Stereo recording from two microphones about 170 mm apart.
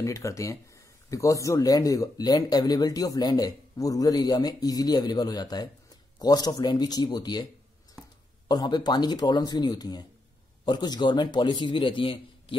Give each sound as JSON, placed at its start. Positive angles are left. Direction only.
{"t": 0.0, "sound": "speech", "side_deg": 20}
{"t": 8.5, "sound": "speech", "side_deg": 25}